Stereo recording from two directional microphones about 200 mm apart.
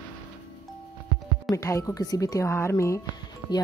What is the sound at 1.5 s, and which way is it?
Speech, 15° left (ahead or behind).